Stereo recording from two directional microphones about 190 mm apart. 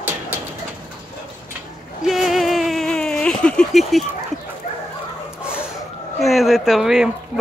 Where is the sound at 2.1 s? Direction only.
Centre (ahead or behind).